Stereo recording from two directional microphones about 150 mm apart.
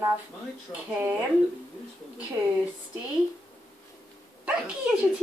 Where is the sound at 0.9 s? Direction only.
15° right (ahead or behind).